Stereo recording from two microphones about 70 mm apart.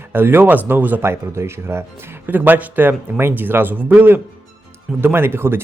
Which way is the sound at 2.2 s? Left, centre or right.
Right.